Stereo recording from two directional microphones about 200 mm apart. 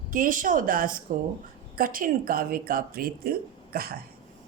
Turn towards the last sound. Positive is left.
turn(degrees=-50)  # may be behind; listen again after turning